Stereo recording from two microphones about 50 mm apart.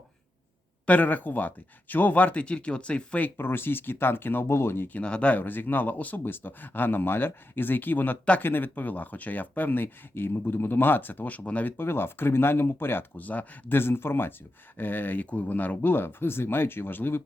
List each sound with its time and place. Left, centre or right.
0.9 s speech: left
2.4 s speech: left
3.2 s speech: left
4.4 s speech: left
4.9 s speech: left
5.3 s speech: left
11.8 s speech: left
13.1 s speech: left
13.7 s speech: left